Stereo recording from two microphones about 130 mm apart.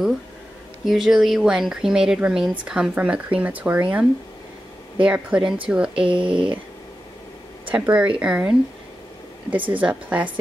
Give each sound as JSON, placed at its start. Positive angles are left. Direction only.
{"t": 0.8, "sound": "speech", "side_deg": 0}
{"t": 5.9, "sound": "speech", "side_deg": -40}
{"t": 7.7, "sound": "speech", "side_deg": -10}
{"t": 9.7, "sound": "speech", "side_deg": -10}